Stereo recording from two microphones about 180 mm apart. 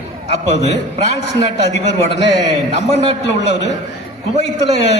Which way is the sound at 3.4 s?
70° left (ahead or behind).